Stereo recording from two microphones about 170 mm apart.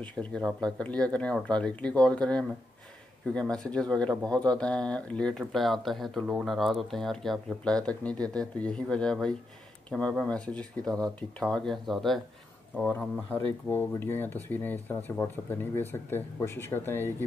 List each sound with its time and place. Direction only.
0.0 s speech: 5° left (ahead or behind)